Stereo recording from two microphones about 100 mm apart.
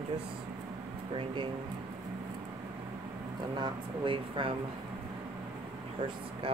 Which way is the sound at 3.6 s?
60° right (ahead or behind).